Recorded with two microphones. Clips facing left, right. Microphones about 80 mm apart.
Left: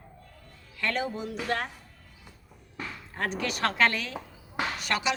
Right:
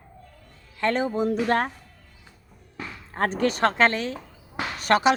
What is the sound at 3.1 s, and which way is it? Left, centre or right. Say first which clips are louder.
Speech: right 8 dB; right.